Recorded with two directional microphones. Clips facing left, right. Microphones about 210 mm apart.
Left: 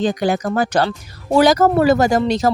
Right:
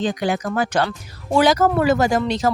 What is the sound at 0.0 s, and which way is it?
Speech, 40° left (ahead or behind).